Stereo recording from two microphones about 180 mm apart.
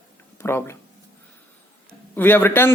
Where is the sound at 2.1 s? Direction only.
10° left (ahead or behind).